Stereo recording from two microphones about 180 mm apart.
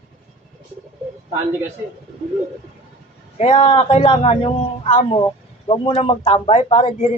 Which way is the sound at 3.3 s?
35° left (ahead or behind).